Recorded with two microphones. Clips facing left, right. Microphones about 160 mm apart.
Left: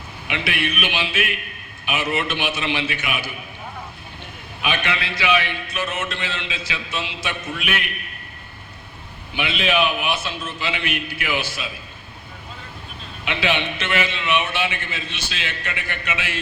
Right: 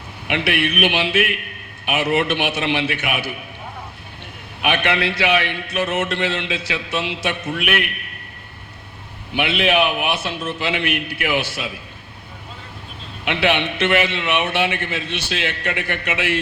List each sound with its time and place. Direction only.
0.3 s a man's voice: 65° right (ahead or behind)
4.6 s a man's voice: 65° right (ahead or behind)
9.3 s a man's voice: 65° right (ahead or behind)
13.2 s a man's voice: 65° right (ahead or behind)